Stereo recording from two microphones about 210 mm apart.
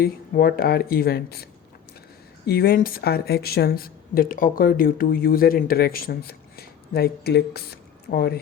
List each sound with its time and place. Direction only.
0.0 s a woman's voice: 45° left (ahead or behind)
2.5 s a woman's voice: 45° left (ahead or behind)